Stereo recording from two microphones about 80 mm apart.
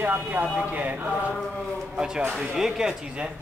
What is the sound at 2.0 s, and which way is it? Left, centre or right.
Speech, centre.